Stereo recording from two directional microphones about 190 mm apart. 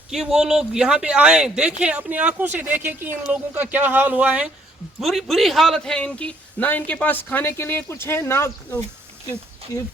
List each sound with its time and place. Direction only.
0.1 s a man's voice: centre (ahead or behind); by 9.8 s 15° left (ahead or behind)